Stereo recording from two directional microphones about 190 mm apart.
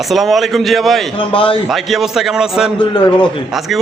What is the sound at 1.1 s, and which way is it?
Speech, 25° left (ahead or behind).